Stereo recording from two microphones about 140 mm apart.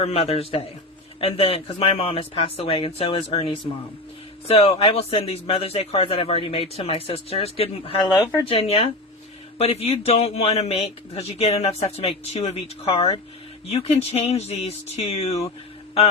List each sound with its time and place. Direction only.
0.0 s a man's voice: 45° left (ahead or behind)